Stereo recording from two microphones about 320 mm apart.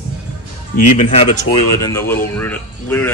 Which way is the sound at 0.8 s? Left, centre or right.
Left.